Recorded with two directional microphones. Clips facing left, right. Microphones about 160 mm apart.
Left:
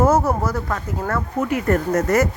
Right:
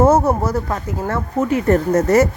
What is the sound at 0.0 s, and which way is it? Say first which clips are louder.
Speech: right 3 dB; 20° right (ahead or behind).